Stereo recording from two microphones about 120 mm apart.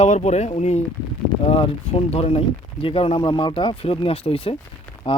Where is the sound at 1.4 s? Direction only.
50° left (ahead or behind).